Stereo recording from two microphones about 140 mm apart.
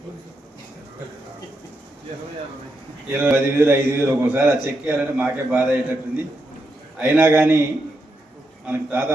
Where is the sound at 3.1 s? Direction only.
15° right (ahead or behind).